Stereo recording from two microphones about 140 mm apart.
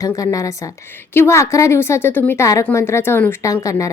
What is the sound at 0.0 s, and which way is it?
A woman's voice, 25° left (ahead or behind).